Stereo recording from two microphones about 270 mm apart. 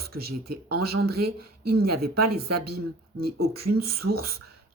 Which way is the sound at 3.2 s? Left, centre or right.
Right.